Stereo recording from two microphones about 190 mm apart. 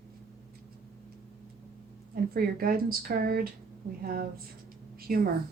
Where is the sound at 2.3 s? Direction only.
50° right (ahead or behind).